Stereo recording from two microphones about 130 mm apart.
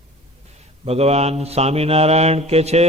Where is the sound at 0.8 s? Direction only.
50° right (ahead or behind).